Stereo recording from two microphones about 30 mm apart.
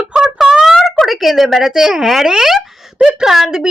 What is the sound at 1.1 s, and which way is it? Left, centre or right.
A woman's voice, centre.